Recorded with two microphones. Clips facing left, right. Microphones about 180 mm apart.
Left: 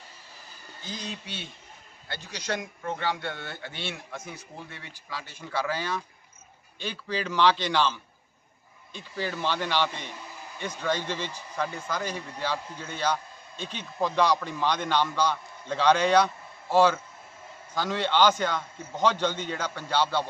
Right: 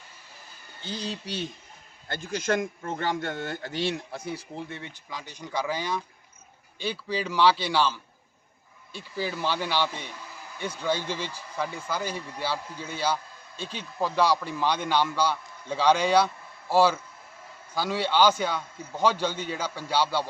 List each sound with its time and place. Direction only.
0.8 s speech: 30° right (ahead or behind)
2.0 s a man's voice: 50° right (ahead or behind); by 20.2 s 10° right (ahead or behind)